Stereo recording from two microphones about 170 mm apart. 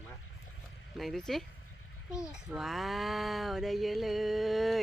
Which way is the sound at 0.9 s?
Centre (ahead or behind).